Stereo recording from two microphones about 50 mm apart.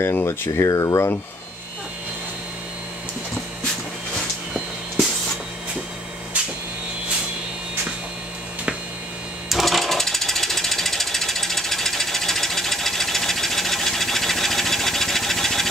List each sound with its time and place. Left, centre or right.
0.0 s speech: left
9.5 s jackhammer: centre